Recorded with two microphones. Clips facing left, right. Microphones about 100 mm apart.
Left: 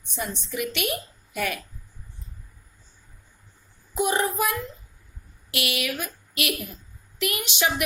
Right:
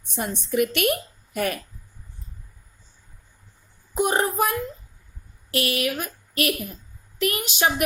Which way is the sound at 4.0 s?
45° right (ahead or behind).